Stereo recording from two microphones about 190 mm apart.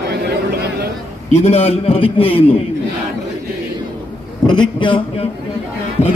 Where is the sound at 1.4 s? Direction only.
35° left (ahead or behind).